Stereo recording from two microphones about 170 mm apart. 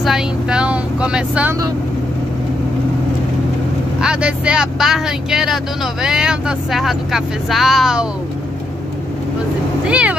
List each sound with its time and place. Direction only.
0.0 s speech: 5° right (ahead or behind)
4.0 s speech: 5° right (ahead or behind)
9.8 s speech: 5° right (ahead or behind)